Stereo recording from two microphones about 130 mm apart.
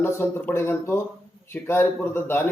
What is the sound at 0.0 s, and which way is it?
Speech, 15° left (ahead or behind).